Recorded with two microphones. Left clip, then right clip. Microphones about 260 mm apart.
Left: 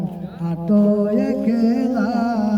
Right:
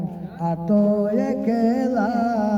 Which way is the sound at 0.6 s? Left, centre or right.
Left.